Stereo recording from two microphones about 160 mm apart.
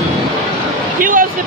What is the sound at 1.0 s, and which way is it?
Vehicle, 60° right (ahead or behind).